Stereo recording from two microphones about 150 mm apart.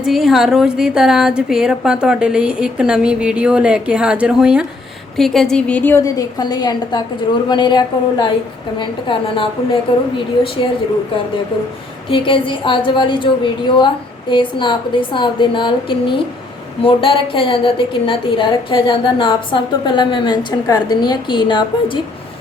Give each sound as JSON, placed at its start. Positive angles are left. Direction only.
{"t": 0.0, "sound": "a woman's voice", "side_deg": 0}
{"t": 12.1, "sound": "a woman's voice", "side_deg": 35}